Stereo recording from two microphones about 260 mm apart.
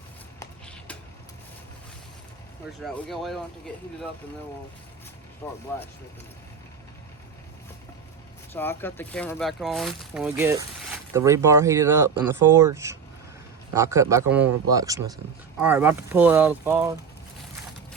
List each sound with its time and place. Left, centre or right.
0.3 s a sound: centre
2.8 s speech: centre
5.4 s speech: centre
8.5 s speech: centre